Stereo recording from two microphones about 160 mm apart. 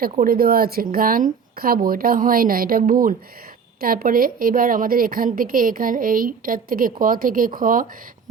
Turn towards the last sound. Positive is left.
turn(degrees=-60)  # may be behind; listen again after turning